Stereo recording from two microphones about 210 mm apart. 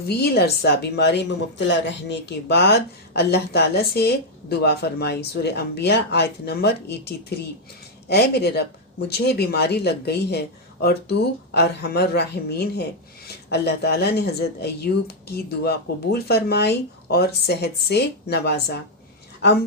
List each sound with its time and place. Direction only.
0.2 s a woman's voice: 50° left (ahead or behind)